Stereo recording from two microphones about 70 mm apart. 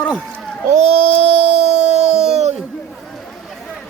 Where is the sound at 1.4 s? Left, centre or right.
Centre.